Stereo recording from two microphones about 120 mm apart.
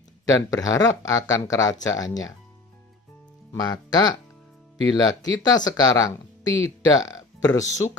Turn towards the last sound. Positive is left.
turn(degrees=30)  # may be behind; listen again after turning